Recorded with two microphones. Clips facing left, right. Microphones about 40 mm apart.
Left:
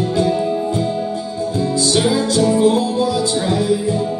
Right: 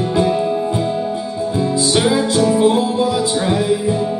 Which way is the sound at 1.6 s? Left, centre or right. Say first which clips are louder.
Right 1 dB; right.